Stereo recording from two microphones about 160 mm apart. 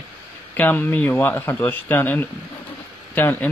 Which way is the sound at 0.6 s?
10° left (ahead or behind).